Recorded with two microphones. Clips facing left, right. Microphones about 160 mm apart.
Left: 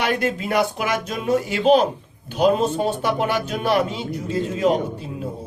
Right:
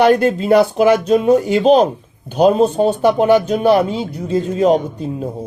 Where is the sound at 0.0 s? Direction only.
35° right (ahead or behind).